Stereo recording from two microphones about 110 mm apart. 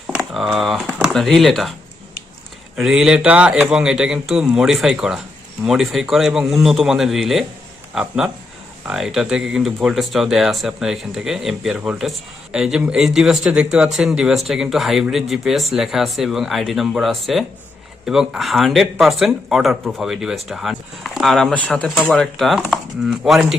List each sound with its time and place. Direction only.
0.1 s speech: 5° right (ahead or behind)
2.7 s speech: 5° right (ahead or behind)